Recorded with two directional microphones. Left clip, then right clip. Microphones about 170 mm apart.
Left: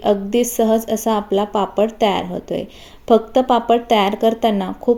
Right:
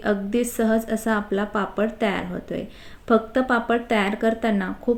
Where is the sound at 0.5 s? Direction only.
5° left (ahead or behind).